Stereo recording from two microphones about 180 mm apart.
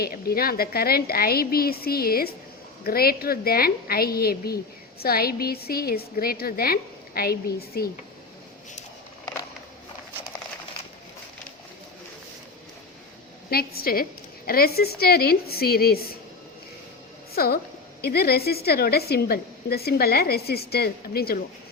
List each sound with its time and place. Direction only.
0.0 s a woman's voice: 55° left (ahead or behind)
13.5 s a woman's voice: 60° left (ahead or behind)
17.3 s a woman's voice: 55° left (ahead or behind)